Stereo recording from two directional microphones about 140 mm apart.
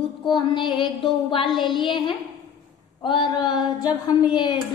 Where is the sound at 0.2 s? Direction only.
35° left (ahead or behind).